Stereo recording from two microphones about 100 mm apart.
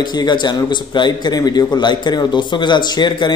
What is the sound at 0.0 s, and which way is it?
A man's voice, 45° left (ahead or behind).